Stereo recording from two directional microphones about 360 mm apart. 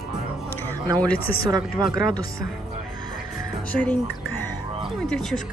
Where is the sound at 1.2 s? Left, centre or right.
Left.